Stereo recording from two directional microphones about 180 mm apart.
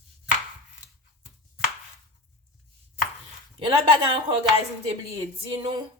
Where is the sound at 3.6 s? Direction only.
25° right (ahead or behind).